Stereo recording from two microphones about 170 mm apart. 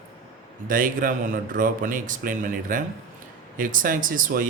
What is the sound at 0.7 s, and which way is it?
Speech, 55° right (ahead or behind).